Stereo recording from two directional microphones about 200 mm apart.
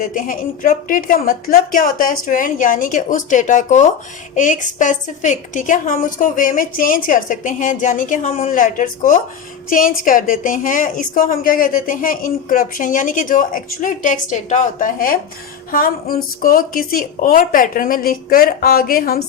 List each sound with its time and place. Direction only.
0.0 s a woman's voice: 40° left (ahead or behind)